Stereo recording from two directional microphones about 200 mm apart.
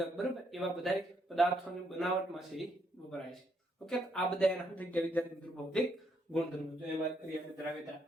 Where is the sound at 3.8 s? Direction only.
5° left (ahead or behind).